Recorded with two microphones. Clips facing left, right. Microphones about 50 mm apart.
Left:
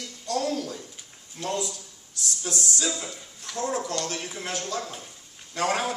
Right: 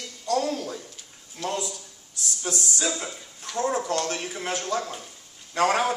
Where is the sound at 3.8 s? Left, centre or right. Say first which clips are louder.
Right 3 dB; right.